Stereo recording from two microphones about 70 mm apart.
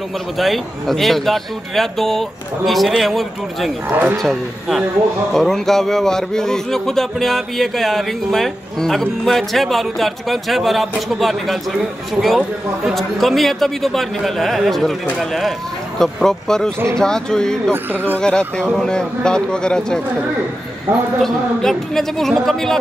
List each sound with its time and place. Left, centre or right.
0.4 s speech: centre
3.9 s speech: right
4.2 s a man's voice: centre
17.9 s speech: right
18.2 s a man's voice: centre
20.9 s speech: right
21.2 s speech: centre